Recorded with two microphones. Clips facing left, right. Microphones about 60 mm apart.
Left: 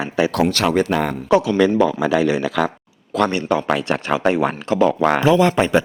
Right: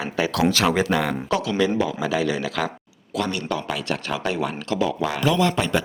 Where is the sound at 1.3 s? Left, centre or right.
Left.